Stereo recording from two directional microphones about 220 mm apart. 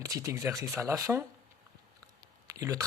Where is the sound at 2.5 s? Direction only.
15° right (ahead or behind).